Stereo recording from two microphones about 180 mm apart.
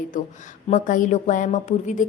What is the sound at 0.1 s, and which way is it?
Speech, 45° left (ahead or behind).